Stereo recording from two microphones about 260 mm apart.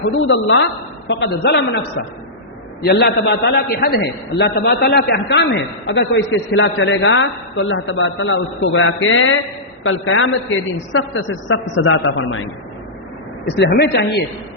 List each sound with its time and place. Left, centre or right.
0.3 s a woman's voice: left
2.8 s a man's voice: left
13.6 s a woman's voice: left